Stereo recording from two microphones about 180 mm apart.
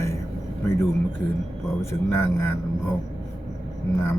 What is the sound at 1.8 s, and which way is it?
Speech, 15° left (ahead or behind).